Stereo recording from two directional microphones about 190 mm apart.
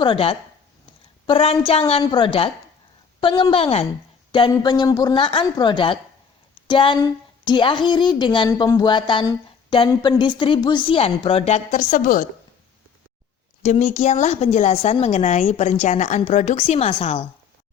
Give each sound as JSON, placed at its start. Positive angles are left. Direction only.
{"t": 0.0, "sound": "speech", "side_deg": 30}
{"t": 13.6, "sound": "a woman's voice", "side_deg": 35}